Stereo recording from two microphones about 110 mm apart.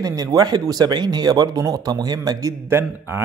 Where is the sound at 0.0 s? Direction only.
35° right (ahead or behind).